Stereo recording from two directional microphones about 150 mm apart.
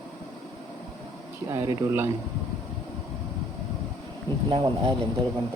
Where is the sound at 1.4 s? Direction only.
20° right (ahead or behind).